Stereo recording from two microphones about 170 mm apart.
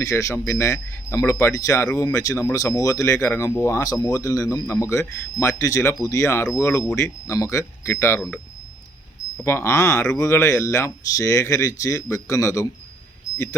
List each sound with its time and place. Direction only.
0.0 s speech: 20° left (ahead or behind)
9.4 s speech: 15° left (ahead or behind)